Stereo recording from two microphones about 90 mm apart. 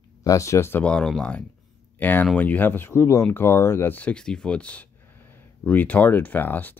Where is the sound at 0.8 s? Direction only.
10° left (ahead or behind).